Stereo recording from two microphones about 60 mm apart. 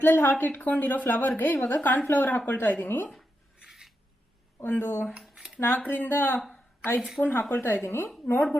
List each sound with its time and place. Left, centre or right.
0.0 s a woman's voice: left
3.6 s filing: centre
4.6 s a woman's voice: left
5.3 s a sound: centre
5.6 s a woman's voice: left
6.5 s a sound: left
7.2 s a woman's voice: left